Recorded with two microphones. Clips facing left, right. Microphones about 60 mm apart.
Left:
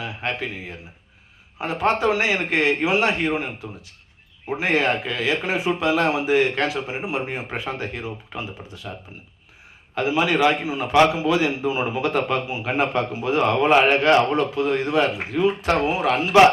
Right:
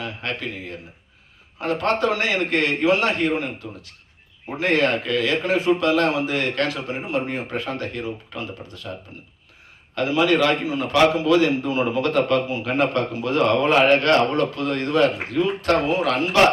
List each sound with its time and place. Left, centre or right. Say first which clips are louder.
0.0 s a man's voice: left 1 dB; centre
9.9 s a man's voice: right 2 dB; centre